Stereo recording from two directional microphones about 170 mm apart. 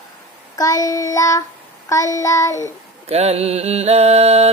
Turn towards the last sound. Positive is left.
turn(degrees=-40)  # may be behind; listen again after turning